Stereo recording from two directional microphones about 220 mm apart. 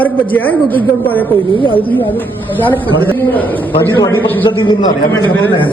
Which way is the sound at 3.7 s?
20° left (ahead or behind).